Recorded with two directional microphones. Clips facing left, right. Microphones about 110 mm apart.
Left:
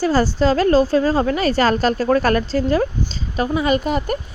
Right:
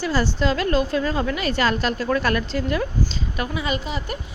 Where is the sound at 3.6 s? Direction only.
50° left (ahead or behind).